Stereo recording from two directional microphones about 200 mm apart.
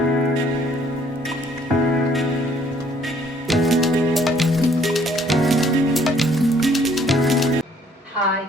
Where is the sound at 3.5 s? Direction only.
Centre (ahead or behind).